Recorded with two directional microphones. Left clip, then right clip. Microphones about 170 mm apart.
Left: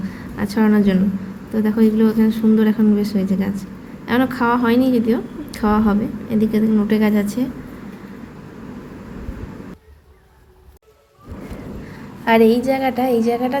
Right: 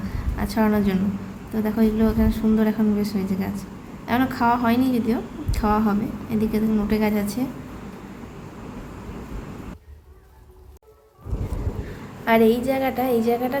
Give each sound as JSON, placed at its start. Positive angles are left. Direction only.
{"t": 0.3, "sound": "a woman's voice", "side_deg": 15}
{"t": 12.2, "sound": "a woman's voice", "side_deg": 25}